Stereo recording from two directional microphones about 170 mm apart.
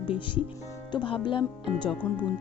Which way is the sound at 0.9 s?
30° left (ahead or behind).